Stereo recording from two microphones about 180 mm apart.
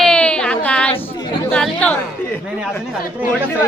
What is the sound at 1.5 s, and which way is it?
Chatter, 5° left (ahead or behind).